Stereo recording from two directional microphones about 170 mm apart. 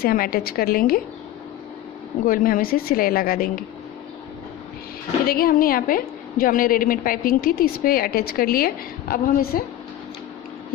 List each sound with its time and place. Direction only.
0.0 s a woman's voice: 60° left (ahead or behind)
2.2 s a woman's voice: 55° left (ahead or behind)
5.2 s a woman's voice: 60° left (ahead or behind)